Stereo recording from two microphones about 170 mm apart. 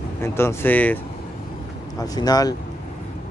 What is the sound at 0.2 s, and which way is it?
Speech, 15° left (ahead or behind).